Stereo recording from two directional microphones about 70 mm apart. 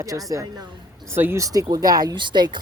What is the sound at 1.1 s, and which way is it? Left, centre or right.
Speech, right.